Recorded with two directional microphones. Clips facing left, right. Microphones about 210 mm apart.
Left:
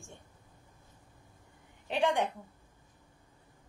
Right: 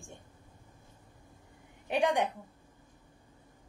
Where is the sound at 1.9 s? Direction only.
15° right (ahead or behind).